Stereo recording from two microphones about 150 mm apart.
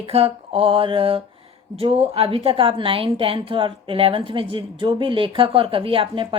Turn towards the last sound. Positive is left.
turn(degrees=-35)  # may be behind; listen again after turning